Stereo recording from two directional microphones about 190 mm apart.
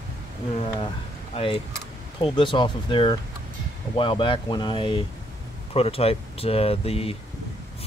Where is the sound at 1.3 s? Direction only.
30° left (ahead or behind).